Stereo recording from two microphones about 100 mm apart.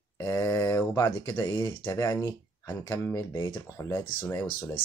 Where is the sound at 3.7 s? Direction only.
30° left (ahead or behind).